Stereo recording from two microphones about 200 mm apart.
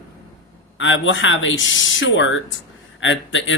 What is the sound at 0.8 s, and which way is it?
Speech, 70° left (ahead or behind).